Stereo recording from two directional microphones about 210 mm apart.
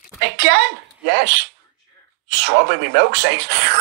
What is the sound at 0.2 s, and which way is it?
A woman's voice, 55° right (ahead or behind).